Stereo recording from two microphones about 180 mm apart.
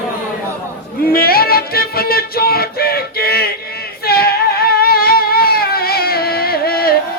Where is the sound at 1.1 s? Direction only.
55° left (ahead or behind).